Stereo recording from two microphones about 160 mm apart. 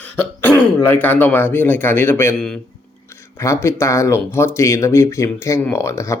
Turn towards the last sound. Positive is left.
turn(degrees=20)  # may be behind; listen again after turning